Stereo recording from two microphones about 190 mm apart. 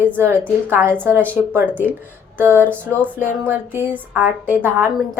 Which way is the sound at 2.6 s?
10° left (ahead or behind).